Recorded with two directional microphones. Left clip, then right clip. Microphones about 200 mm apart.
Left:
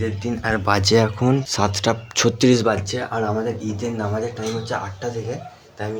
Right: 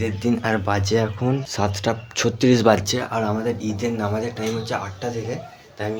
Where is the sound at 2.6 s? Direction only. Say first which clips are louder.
Right 4 dB; 35° right (ahead or behind).